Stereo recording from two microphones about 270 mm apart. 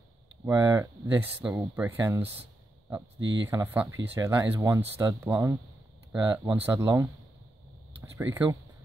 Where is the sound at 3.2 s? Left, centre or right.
Right.